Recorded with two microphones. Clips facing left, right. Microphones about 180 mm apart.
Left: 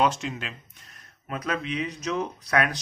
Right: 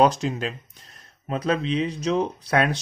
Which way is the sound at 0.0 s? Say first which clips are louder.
Right 5 dB; 40° right (ahead or behind).